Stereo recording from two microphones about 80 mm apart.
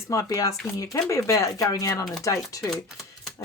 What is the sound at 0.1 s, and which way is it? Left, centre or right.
Speech, left.